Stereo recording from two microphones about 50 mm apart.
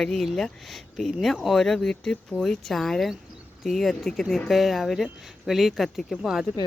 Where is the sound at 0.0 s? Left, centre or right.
Centre.